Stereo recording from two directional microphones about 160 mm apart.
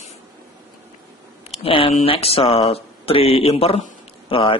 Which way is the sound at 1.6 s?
35° left (ahead or behind).